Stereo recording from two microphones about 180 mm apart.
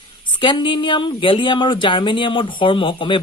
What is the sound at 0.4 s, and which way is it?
Speech, 25° left (ahead or behind).